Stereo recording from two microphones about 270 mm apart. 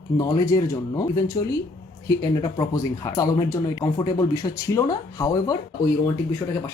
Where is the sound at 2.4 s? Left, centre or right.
Centre.